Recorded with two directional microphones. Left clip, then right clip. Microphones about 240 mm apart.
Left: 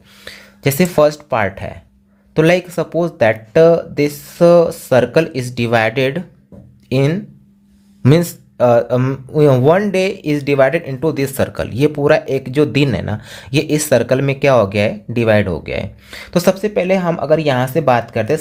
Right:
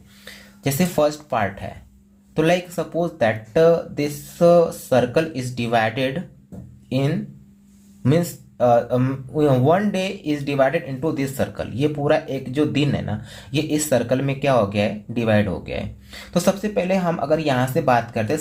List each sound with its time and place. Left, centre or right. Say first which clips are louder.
0.3 s speech: left 7 dB; left